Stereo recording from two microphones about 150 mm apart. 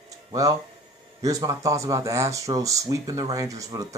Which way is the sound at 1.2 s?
25° right (ahead or behind).